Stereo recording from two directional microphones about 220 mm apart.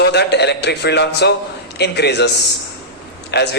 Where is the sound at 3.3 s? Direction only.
50° left (ahead or behind).